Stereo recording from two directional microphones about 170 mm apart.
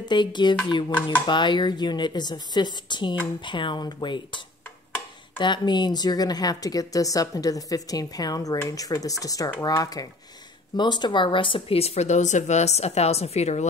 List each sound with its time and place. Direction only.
0.0 s speech: 25° left (ahead or behind)
5.4 s speech: 25° left (ahead or behind)